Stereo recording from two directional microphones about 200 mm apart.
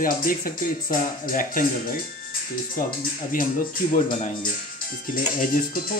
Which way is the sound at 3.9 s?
40° left (ahead or behind).